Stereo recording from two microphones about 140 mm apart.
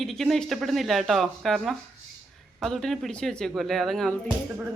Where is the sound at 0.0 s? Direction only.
Centre (ahead or behind).